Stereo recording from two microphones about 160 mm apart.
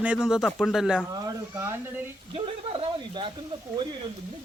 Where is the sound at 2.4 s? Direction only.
35° right (ahead or behind).